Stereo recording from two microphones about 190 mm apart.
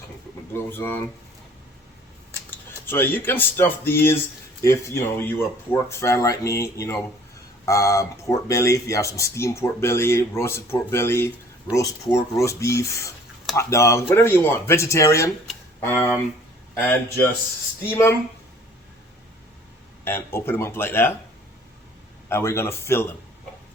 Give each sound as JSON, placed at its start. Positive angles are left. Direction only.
{"t": 0.5, "sound": "speech", "side_deg": 10}
{"t": 2.8, "sound": "speech", "side_deg": 10}
{"t": 16.7, "sound": "speech", "side_deg": 10}
{"t": 20.1, "sound": "speech", "side_deg": 10}
{"t": 22.3, "sound": "speech", "side_deg": 15}